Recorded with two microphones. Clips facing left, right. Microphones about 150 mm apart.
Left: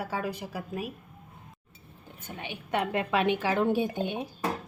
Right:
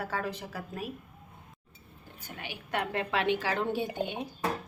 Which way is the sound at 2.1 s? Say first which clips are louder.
Left 3 dB; 20° left (ahead or behind).